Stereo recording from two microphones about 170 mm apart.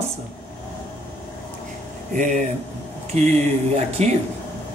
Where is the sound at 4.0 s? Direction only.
40° right (ahead or behind).